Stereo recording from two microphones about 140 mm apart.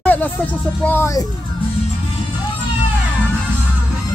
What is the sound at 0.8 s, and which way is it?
Speech, 15° left (ahead or behind).